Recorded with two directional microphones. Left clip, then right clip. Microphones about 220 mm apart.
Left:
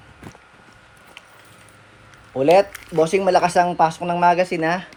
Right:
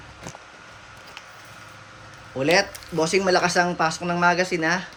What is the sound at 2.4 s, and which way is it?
Speech, 20° left (ahead or behind).